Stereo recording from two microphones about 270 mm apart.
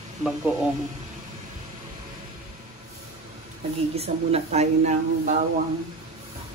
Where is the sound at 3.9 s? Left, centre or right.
Right.